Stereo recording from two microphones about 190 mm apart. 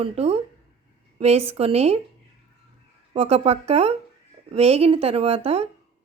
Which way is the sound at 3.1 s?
30° right (ahead or behind).